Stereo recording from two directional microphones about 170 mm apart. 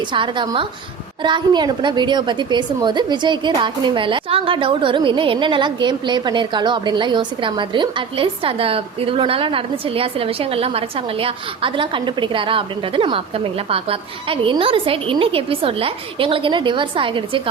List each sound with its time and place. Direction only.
0.0 s a woman's voice: 30° right (ahead or behind)